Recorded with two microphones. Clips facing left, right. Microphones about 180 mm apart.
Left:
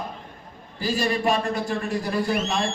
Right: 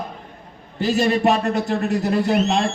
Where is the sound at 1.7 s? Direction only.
70° right (ahead or behind).